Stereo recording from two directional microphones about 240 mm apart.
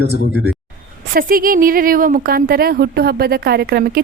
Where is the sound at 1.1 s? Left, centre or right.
Right.